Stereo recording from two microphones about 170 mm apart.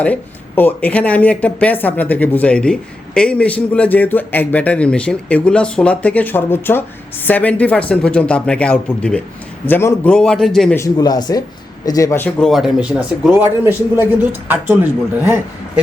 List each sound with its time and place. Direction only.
0.0 s speech: 10° left (ahead or behind)
10.8 s speech: 20° left (ahead or behind)
12.4 s a man's voice: centre (ahead or behind)